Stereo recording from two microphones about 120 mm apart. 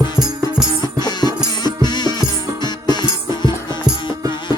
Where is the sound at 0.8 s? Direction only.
35° left (ahead or behind).